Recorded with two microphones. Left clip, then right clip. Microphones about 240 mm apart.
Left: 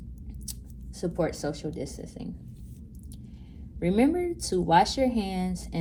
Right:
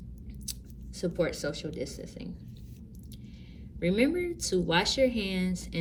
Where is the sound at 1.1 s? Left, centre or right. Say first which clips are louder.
Left 1 dB; centre.